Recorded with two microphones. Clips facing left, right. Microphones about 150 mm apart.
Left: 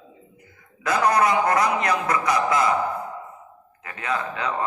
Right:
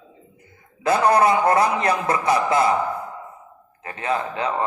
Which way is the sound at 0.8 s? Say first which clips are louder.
Right 3 dB; 30° right (ahead or behind).